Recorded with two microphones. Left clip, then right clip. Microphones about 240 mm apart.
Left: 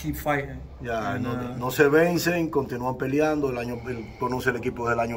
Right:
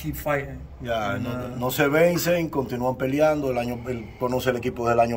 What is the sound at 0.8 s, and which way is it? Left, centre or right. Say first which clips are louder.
Speech: right 2 dB; right.